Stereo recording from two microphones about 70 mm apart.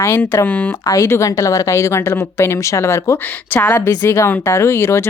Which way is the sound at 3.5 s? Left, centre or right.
Left.